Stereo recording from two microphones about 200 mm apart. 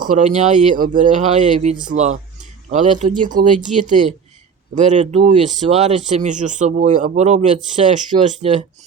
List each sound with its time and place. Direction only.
0.1 s speech: 35° right (ahead or behind)